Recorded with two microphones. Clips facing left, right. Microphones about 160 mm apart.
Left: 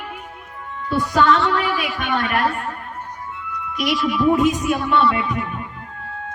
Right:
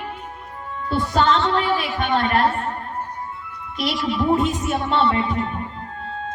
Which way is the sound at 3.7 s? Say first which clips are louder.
Left 2 dB; 25° right (ahead or behind).